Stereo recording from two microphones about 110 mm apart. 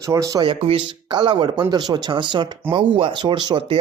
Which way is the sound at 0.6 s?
55° right (ahead or behind).